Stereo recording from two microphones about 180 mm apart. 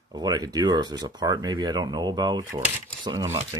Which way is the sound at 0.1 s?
20° right (ahead or behind).